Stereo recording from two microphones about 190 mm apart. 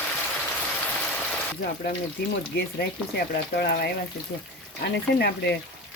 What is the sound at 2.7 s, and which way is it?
Speech, 55° left (ahead or behind).